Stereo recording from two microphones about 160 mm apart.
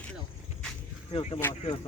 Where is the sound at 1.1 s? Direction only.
35° left (ahead or behind).